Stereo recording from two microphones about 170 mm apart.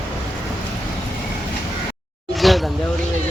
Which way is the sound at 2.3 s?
Centre (ahead or behind).